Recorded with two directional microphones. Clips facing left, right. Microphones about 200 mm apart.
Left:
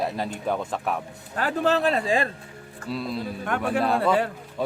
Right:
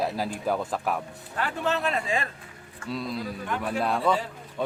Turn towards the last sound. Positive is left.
turn(degrees=0)  # may be behind; listen again after turning